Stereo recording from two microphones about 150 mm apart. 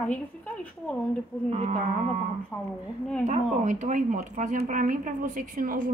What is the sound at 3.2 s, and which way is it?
Speech, 55° right (ahead or behind).